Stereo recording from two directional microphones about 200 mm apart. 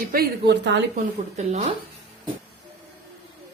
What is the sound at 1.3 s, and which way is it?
Speech, 35° right (ahead or behind).